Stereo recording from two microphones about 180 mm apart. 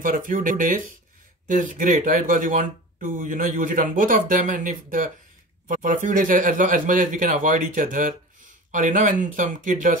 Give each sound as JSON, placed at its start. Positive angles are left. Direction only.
{"t": 0.0, "sound": "speech", "side_deg": -50}